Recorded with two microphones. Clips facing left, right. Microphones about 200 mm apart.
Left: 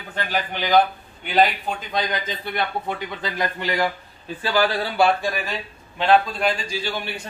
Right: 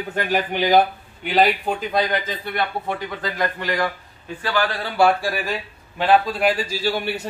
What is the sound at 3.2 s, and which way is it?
A man's voice, 25° left (ahead or behind).